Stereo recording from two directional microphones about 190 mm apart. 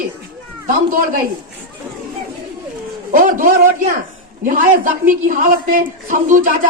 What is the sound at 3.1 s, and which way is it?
A woman's voice, 50° right (ahead or behind).